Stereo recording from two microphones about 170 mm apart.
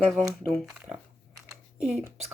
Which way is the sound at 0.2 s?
Centre (ahead or behind).